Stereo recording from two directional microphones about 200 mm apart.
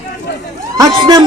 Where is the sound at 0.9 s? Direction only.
20° right (ahead or behind).